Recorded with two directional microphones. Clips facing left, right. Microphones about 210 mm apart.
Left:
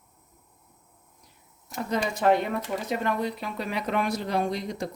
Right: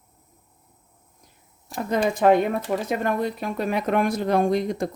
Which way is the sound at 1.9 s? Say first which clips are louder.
Right 5 dB; 50° right (ahead or behind).